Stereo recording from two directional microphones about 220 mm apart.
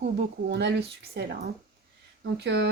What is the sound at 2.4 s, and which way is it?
Speech, 50° right (ahead or behind).